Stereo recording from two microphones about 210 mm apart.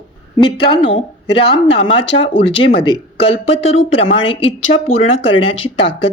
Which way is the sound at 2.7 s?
25° left (ahead or behind).